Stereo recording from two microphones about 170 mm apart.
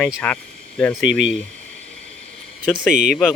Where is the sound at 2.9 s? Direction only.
50° right (ahead or behind).